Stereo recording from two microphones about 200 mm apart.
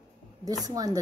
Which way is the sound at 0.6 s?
20° right (ahead or behind).